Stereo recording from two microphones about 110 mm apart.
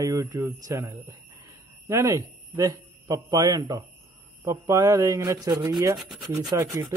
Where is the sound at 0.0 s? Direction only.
30° right (ahead or behind).